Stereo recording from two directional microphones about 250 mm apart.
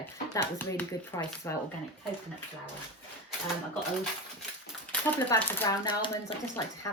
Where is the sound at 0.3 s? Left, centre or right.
Centre.